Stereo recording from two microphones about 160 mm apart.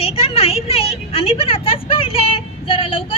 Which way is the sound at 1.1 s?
35° left (ahead or behind).